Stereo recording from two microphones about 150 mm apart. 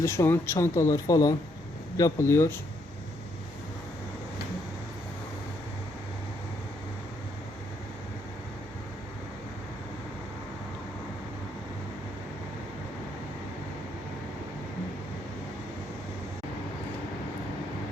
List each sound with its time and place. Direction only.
0.0 s speech: 20° left (ahead or behind)